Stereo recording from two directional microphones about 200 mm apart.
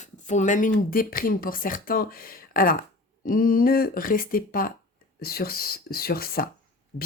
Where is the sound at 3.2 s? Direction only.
45° left (ahead or behind).